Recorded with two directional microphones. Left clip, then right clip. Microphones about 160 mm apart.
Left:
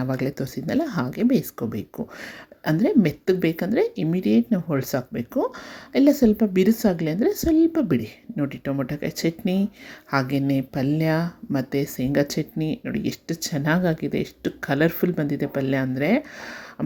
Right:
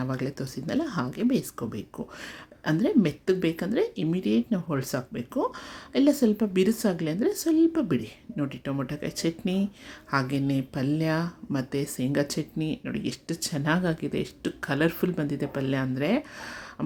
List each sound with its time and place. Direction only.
0.0 s speech: 25° left (ahead or behind)